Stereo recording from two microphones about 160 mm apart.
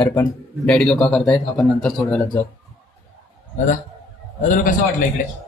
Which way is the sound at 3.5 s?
50° left (ahead or behind).